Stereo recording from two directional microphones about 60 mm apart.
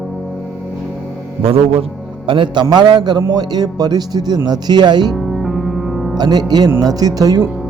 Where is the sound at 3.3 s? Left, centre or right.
Right.